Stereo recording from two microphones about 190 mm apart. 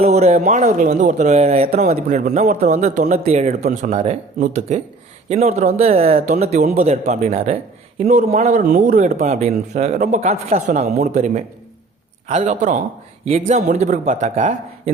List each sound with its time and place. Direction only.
0.0 s speech: 35° right (ahead or behind)